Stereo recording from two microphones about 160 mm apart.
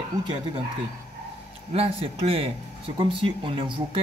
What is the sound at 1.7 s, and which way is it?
Speech, 35° right (ahead or behind).